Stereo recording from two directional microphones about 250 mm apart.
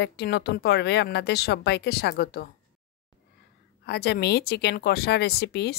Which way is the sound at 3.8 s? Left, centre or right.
Left.